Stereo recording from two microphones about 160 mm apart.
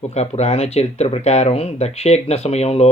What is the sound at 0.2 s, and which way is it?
Speech, 40° left (ahead or behind).